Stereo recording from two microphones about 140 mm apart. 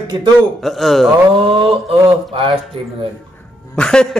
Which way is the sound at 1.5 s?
40° right (ahead or behind).